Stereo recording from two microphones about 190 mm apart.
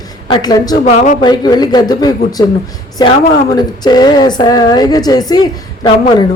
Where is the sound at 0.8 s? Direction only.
40° left (ahead or behind).